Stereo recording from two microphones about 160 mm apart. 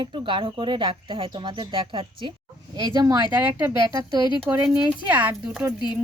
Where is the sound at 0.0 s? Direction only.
30° right (ahead or behind).